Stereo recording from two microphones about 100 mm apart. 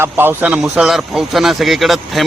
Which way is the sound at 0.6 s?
Centre (ahead or behind).